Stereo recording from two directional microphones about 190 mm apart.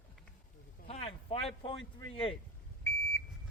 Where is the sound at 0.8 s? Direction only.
30° left (ahead or behind).